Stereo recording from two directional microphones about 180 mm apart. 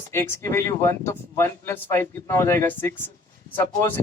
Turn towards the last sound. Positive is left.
turn(degrees=10)  # may be behind; listen again after turning